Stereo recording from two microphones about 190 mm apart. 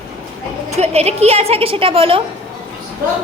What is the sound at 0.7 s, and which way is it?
A woman's voice, 35° right (ahead or behind).